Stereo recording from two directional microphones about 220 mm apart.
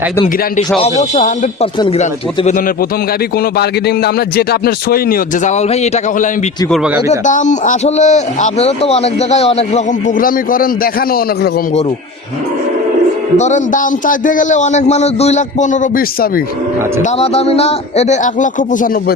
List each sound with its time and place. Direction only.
0.8 s a man's voice: 30° left (ahead or behind)
3.6 s a man's voice: 45° left (ahead or behind)
13.3 s a man's voice: 30° left (ahead or behind)
17.2 s a man's voice: 25° left (ahead or behind)